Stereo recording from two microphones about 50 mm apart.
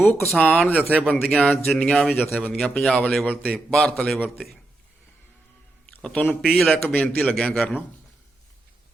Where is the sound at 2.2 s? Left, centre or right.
Left.